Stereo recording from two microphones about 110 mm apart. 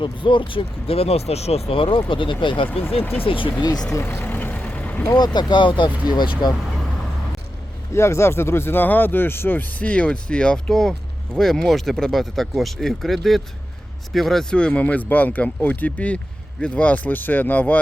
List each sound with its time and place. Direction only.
0.0 s speech: 50° left (ahead or behind)
3.0 s speech: 20° left (ahead or behind)
3.2 s speech: 50° left (ahead or behind)
3.6 s speech: 40° left (ahead or behind)
3.9 s vehicle: 20° left (ahead or behind)
5.1 s speech: 40° left (ahead or behind)
7.9 s speech: 25° left (ahead or behind)